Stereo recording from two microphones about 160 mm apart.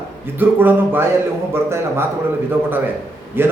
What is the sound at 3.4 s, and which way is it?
Speech, 15° right (ahead or behind).